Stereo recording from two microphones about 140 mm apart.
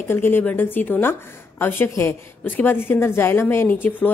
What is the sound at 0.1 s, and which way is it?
A woman's voice, 15° left (ahead or behind).